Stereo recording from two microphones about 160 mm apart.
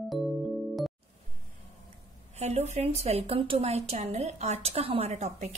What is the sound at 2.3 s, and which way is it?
A woman's voice, 45° right (ahead or behind).